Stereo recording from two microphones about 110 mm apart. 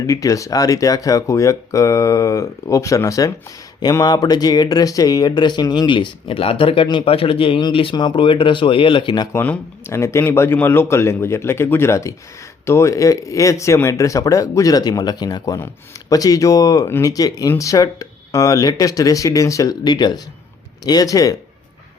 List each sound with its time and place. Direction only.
0.1 s speech: 30° left (ahead or behind)
9.3 s speech: 20° left (ahead or behind)